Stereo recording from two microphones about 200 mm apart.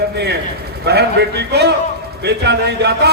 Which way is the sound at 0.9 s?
55° right (ahead or behind).